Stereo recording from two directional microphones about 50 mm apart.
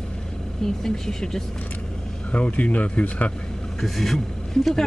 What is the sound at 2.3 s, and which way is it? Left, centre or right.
Speech, left.